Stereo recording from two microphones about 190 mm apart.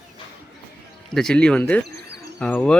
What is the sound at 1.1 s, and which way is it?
Speech, 5° left (ahead or behind).